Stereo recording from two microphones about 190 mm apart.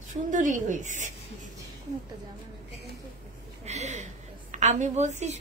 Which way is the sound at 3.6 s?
35° right (ahead or behind).